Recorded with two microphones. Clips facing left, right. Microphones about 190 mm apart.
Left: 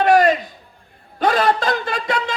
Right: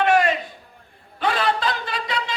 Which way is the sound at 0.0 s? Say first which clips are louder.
Left 5 dB; 40° left (ahead or behind).